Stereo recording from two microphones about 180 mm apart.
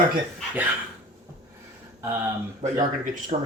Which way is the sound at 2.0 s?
15° right (ahead or behind).